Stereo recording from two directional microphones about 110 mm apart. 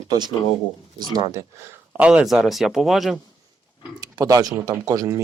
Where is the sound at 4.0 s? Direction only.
35° right (ahead or behind).